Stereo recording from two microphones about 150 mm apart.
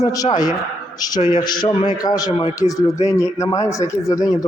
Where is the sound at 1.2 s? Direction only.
50° left (ahead or behind).